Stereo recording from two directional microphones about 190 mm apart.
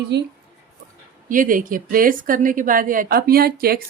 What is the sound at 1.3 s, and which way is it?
A woman's voice, 45° right (ahead or behind).